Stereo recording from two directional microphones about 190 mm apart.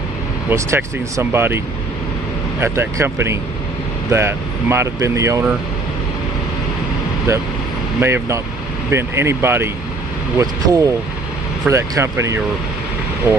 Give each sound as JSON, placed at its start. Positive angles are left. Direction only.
{"t": 0.5, "sound": "speech", "side_deg": -15}
{"t": 7.3, "sound": "speech", "side_deg": -15}